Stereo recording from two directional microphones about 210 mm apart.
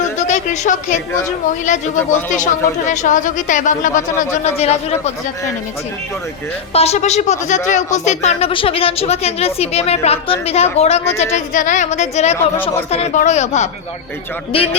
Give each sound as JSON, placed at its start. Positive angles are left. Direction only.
{"t": 0.2, "sound": "a sound", "side_deg": 35}
{"t": 2.0, "sound": "speech", "side_deg": 35}
{"t": 6.7, "sound": "a woman's voice", "side_deg": 30}